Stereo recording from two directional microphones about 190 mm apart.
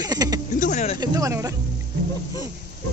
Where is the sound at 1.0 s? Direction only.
20° right (ahead or behind).